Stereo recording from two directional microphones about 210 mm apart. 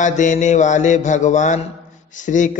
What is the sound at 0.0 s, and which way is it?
Mantra, 35° left (ahead or behind).